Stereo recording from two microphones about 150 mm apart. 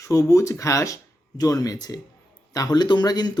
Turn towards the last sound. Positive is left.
turn(degrees=25)  # may be behind; listen again after turning